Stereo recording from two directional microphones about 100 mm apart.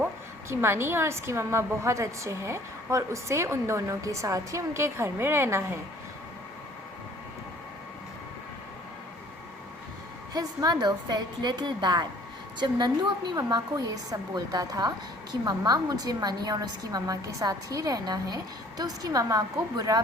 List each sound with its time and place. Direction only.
0.0 s a woman's voice: 25° right (ahead or behind)
10.3 s a woman's voice: 40° right (ahead or behind)